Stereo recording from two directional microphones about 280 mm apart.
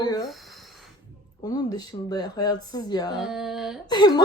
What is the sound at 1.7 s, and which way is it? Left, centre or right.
A woman's voice, centre.